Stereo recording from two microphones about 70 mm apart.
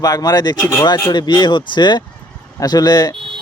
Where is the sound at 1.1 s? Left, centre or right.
Left.